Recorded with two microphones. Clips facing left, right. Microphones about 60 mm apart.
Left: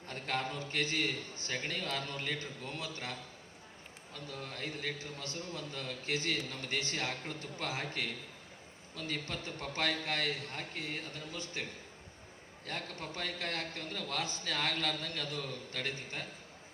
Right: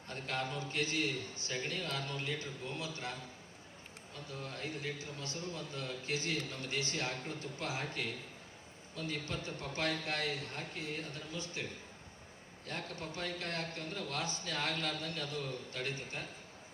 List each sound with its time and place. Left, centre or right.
0.1 s a man's voice: left
4.4 s a man's voice: left
4.9 s a man's voice: left
6.1 s a man's voice: left
9.3 s a man's voice: left